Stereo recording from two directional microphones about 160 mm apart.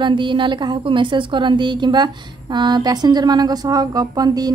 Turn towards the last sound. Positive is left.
turn(degrees=-25)  # may be behind; listen again after turning